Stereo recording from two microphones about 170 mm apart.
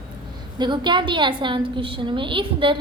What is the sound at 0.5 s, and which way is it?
A woman's voice, 25° right (ahead or behind).